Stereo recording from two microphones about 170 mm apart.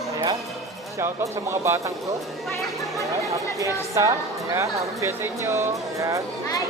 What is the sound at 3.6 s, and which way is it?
A woman's voice, 20° right (ahead or behind).